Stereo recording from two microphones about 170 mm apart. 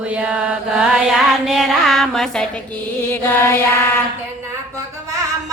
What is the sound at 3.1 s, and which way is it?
Mantra, 15° left (ahead or behind).